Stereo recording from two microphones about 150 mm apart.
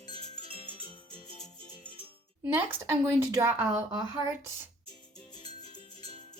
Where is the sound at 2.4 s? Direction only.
15° right (ahead or behind).